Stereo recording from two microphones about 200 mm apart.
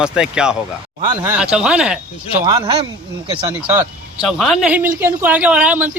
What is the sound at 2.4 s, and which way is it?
Speech, 20° right (ahead or behind).